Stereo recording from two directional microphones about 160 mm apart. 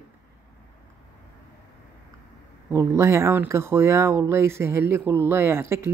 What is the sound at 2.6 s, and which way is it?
Speech, 15° right (ahead or behind).